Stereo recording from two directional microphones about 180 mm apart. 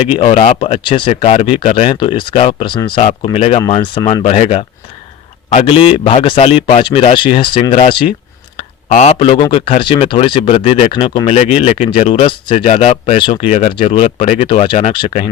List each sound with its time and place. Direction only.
0.0 s speech: 30° left (ahead or behind)
8.9 s speech: 40° left (ahead or behind)